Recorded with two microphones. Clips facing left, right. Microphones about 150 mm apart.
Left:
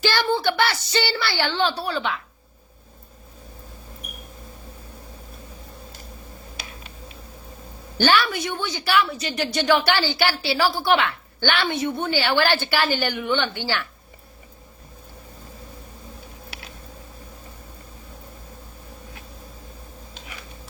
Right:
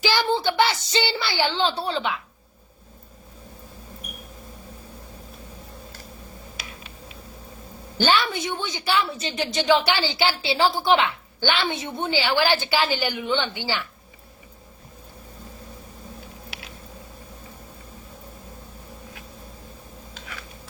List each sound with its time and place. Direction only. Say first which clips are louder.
0.0 s a sound: left 1 dB; 15° right (ahead or behind)
7.9 s a woman's voice: left 2 dB; 20° right (ahead or behind)
20.1 s tick: right 2 dB; 20° left (ahead or behind)